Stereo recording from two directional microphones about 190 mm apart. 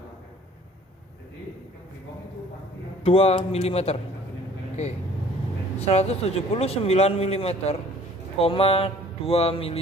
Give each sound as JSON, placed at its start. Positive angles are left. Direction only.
{"t": 3.0, "sound": "speech", "side_deg": 30}
{"t": 5.8, "sound": "speech", "side_deg": 35}